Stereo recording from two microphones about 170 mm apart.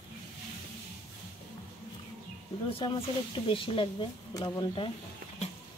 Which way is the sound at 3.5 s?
30° left (ahead or behind).